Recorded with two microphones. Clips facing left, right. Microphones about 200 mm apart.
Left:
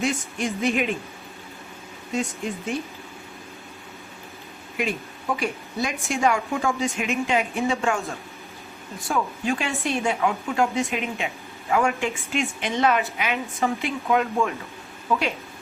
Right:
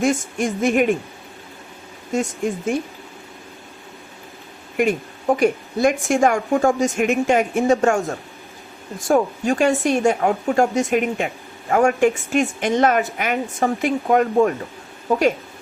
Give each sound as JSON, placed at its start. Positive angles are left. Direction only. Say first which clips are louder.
{"t": 0.0, "sound": "a woman's voice", "louder": "right 6 dB", "side_deg": -50}
{"t": 2.1, "sound": "a woman's voice", "louder": "right 6 dB", "side_deg": -50}
{"t": 4.8, "sound": "a woman's voice", "louder": "right 8 dB", "side_deg": -50}
{"t": 9.0, "sound": "a woman's voice", "louder": "right 7 dB", "side_deg": -45}